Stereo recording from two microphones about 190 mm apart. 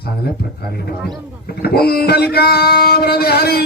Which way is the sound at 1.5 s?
55° left (ahead or behind).